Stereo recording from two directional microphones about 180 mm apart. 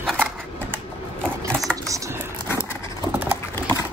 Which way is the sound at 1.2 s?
5° left (ahead or behind).